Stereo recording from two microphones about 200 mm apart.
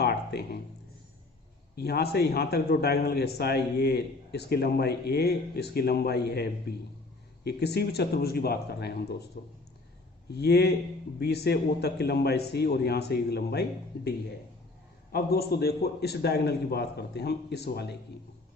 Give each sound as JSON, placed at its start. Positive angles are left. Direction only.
{"t": 0.0, "sound": "music", "side_deg": 55}
{"t": 1.7, "sound": "a man's voice", "side_deg": 55}
{"t": 10.2, "sound": "a man's voice", "side_deg": 55}
{"t": 15.1, "sound": "a man's voice", "side_deg": 50}